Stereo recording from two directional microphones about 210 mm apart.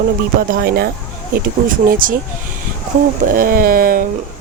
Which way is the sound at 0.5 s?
50° right (ahead or behind).